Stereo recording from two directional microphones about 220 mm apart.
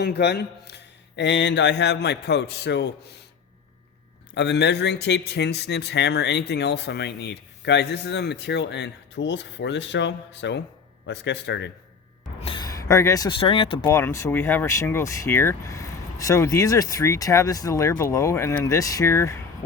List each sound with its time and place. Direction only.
0.0 s speech: 50° left (ahead or behind)
4.4 s speech: 50° left (ahead or behind)
12.4 s speech: 20° left (ahead or behind)
13.8 s speech: 15° left (ahead or behind)